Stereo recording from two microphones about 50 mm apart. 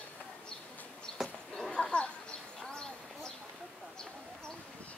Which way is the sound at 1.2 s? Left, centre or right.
Centre.